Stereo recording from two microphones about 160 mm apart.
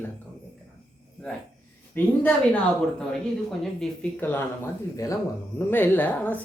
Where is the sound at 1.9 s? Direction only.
10° left (ahead or behind).